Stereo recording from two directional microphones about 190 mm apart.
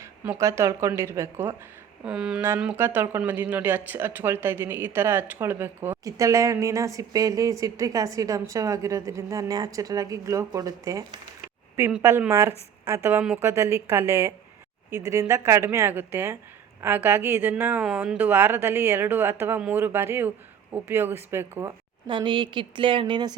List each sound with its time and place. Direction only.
0.3 s speech: 15° right (ahead or behind)
22.0 s a woman's voice: 25° right (ahead or behind)